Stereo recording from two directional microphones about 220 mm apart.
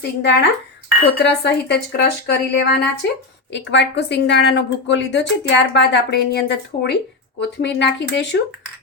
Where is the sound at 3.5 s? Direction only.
50° left (ahead or behind).